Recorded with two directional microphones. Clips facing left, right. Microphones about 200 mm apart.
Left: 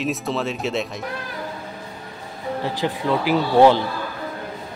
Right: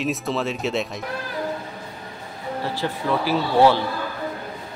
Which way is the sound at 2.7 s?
15° left (ahead or behind).